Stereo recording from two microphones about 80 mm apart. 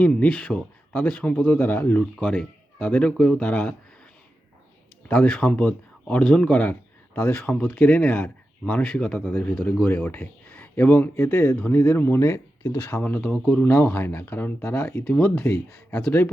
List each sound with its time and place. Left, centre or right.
0.0 s speech: centre
5.0 s a man's voice: centre
13.0 s speech: centre
13.3 s speech: centre
13.8 s speech: left
15.9 s speech: centre